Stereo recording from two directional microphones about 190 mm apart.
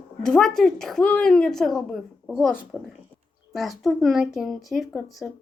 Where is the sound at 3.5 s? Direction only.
Centre (ahead or behind).